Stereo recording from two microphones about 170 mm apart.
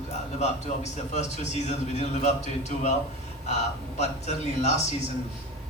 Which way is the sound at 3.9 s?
40° left (ahead or behind).